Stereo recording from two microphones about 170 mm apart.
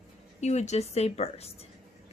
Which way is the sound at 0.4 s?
40° left (ahead or behind).